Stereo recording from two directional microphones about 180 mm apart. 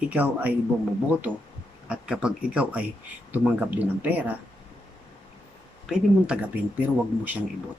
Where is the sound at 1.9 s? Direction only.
5° right (ahead or behind).